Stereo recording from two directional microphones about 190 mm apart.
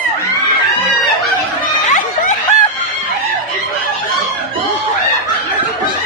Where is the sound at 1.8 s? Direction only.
40° left (ahead or behind).